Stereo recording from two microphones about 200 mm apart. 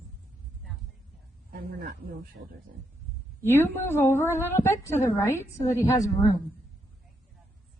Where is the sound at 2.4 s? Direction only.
55° right (ahead or behind).